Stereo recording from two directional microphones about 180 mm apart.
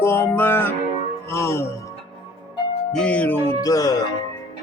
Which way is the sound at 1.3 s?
15° left (ahead or behind).